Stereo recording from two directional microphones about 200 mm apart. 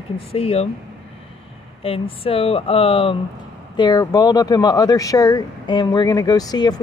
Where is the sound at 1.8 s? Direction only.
30° left (ahead or behind).